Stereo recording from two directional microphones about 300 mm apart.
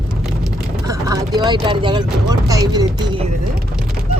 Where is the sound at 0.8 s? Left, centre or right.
Centre.